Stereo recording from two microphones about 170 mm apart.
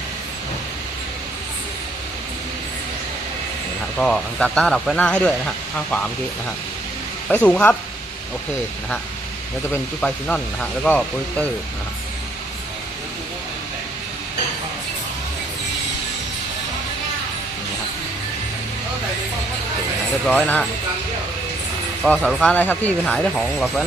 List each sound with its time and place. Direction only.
3.9 s speech: 5° left (ahead or behind)
7.3 s speech: 5° left (ahead or behind)
9.7 s speech: 10° left (ahead or behind)
20.2 s speech: 5° left (ahead or behind)
22.0 s speech: centre (ahead or behind)